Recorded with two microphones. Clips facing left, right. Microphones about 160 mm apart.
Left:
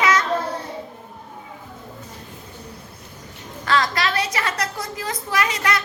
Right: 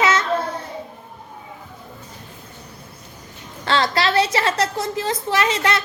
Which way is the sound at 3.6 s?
30° right (ahead or behind).